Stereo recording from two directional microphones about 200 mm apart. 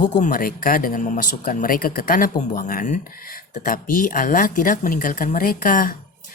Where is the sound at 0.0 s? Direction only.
40° left (ahead or behind).